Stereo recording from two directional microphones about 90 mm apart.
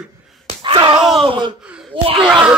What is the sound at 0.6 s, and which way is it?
Groan, 65° right (ahead or behind).